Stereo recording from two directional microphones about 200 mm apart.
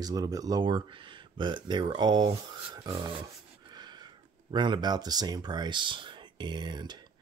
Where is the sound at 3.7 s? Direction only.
20° right (ahead or behind).